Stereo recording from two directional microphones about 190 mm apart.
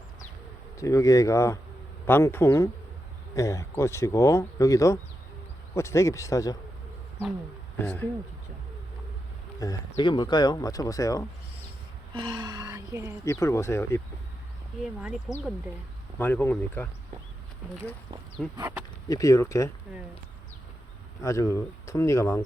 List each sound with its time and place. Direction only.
0.8 s speech: 15° left (ahead or behind)
7.8 s speech: 10° left (ahead or behind)
9.6 s speech: 15° left (ahead or behind)
12.1 s gasp: 25° right (ahead or behind)
13.2 s speech: 15° left (ahead or behind)
15.3 s speech: 5° right (ahead or behind)
16.1 s speech: 10° left (ahead or behind)
19.0 s speech: 20° left (ahead or behind)
21.2 s speech: 15° left (ahead or behind)